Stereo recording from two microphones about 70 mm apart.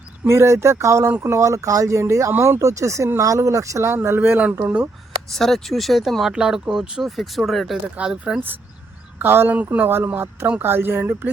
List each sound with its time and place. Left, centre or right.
0.3 s speech: right
3.9 s speech: right
5.3 s speech: centre
7.9 s speech: centre
9.1 s speech: right